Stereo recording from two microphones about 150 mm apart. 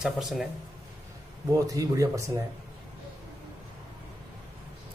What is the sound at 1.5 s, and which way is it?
Speech, 20° right (ahead or behind).